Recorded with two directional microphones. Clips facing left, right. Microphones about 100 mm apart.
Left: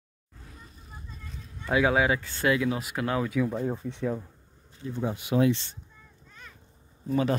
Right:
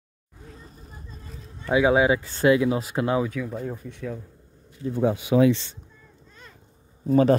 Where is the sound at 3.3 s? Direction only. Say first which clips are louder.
Left 3 dB; 15° left (ahead or behind).